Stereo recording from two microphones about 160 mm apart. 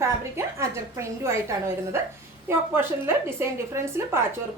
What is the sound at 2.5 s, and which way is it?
A woman's voice, 15° right (ahead or behind).